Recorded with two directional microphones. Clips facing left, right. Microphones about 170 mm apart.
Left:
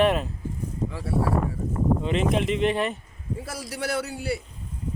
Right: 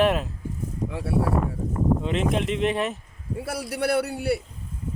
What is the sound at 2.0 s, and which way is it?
Speech, centre (ahead or behind).